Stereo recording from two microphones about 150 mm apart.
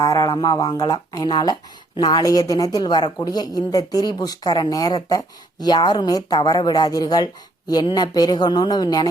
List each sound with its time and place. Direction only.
0.0 s a woman's voice: 25° left (ahead or behind)